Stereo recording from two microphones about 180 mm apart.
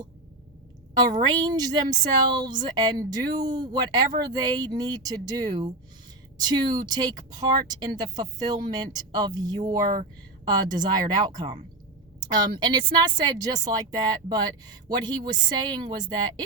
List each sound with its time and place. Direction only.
1.3 s speech: 20° right (ahead or behind)